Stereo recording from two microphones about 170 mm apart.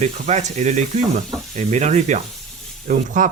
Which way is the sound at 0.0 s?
40° right (ahead or behind).